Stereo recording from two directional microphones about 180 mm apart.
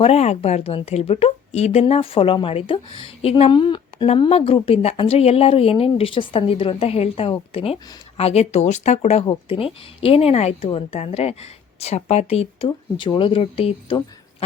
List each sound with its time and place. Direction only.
0.0 s a woman's voice: 35° left (ahead or behind)